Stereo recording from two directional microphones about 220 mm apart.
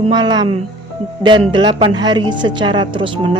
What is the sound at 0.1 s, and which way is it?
Speech, 20° right (ahead or behind).